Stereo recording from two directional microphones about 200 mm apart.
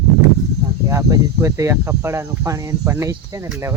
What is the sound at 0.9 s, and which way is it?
Speech, 15° right (ahead or behind).